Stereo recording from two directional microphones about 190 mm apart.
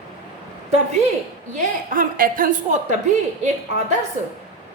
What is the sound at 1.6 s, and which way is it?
A woman's voice, 45° right (ahead or behind).